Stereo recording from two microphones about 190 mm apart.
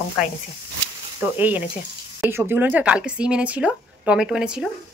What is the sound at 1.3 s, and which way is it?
Speech, 10° right (ahead or behind).